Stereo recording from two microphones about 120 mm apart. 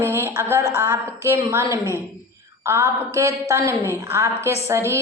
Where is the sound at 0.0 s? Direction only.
20° right (ahead or behind).